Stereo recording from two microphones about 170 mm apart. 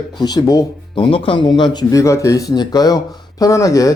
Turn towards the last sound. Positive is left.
turn(degrees=20)  # may be behind; listen again after turning